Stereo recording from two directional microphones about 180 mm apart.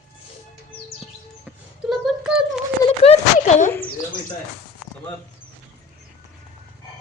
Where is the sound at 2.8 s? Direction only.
35° left (ahead or behind).